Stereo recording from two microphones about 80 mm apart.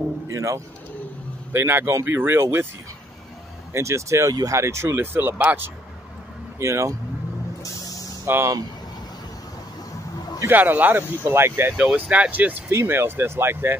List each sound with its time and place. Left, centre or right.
0.3 s speech: right
1.5 s speech: right
3.7 s speech: right; by 5.7 s centre
6.6 s speech: right
8.3 s speech: right
10.4 s speech: right
11.7 s speech: centre; by 13.7 s right